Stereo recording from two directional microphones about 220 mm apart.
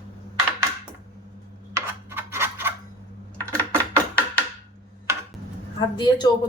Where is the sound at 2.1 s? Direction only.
10° right (ahead or behind).